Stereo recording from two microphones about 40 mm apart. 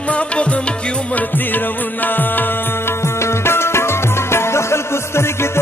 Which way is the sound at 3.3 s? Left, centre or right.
Left.